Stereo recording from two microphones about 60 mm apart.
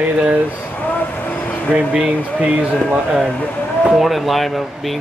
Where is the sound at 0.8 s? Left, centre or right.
Left.